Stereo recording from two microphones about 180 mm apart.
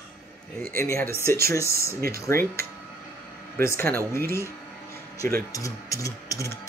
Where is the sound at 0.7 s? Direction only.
15° left (ahead or behind).